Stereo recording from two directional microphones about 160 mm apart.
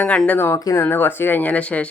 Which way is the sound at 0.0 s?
10° left (ahead or behind).